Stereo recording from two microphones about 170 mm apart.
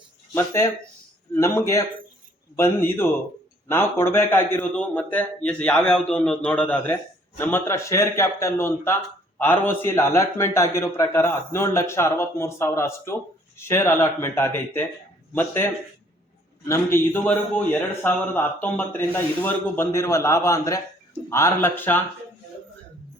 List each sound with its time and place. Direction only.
0.3 s a man's voice: 15° left (ahead or behind)
16.6 s a man's voice: 15° left (ahead or behind)